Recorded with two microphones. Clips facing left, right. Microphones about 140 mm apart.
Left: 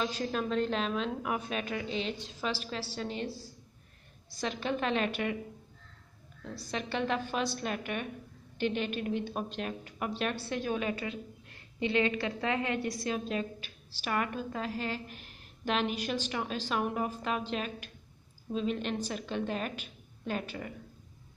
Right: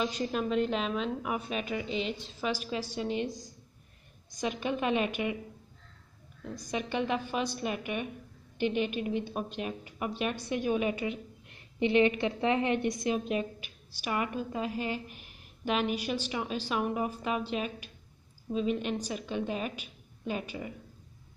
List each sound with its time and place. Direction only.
0.0 s a woman's voice: 5° right (ahead or behind)
6.5 s a woman's voice: 15° right (ahead or behind)